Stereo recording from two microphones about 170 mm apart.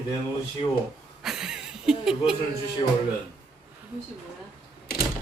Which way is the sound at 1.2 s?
5° right (ahead or behind).